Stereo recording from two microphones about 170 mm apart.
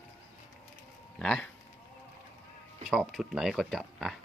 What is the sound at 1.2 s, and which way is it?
Speech, 5° left (ahead or behind).